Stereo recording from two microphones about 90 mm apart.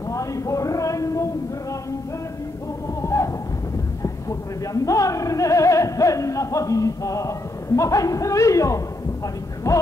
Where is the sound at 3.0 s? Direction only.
35° left (ahead or behind).